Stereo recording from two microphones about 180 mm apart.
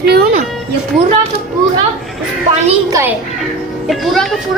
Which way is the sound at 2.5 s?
40° right (ahead or behind).